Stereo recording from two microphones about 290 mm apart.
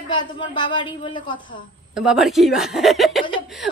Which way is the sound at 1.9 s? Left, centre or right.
Centre.